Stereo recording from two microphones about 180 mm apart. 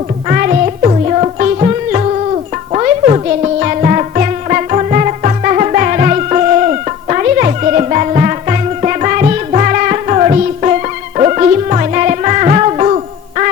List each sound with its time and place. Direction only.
0.3 s music: 45° right (ahead or behind)